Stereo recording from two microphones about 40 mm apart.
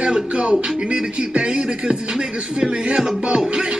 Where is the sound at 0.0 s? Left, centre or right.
Right.